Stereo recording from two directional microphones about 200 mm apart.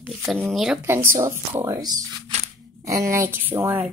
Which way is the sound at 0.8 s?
10° right (ahead or behind).